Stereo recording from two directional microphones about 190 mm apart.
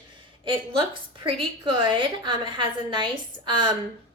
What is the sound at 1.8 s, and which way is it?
A woman's voice, 25° right (ahead or behind).